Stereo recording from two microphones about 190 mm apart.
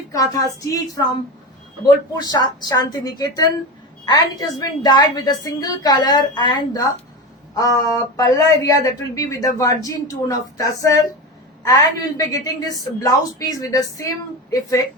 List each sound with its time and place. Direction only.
0.1 s speech: 20° left (ahead or behind)
2.1 s a woman's voice: 20° left (ahead or behind)